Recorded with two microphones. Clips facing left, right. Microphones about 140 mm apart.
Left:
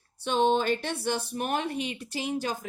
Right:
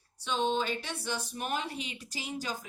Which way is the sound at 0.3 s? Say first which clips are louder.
Left 6 dB; 55° left (ahead or behind).